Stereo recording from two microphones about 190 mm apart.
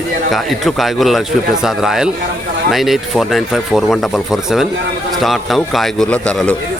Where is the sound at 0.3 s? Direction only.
Centre (ahead or behind).